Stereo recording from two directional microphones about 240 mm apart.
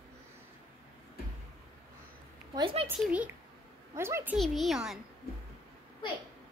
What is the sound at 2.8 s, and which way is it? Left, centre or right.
A child's voice, centre.